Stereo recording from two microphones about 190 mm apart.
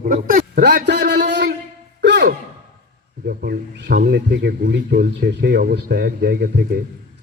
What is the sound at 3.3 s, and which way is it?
Speech, 55° right (ahead or behind).